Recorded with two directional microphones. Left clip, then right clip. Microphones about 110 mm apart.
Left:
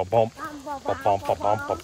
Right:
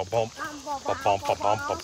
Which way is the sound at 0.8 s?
15° right (ahead or behind).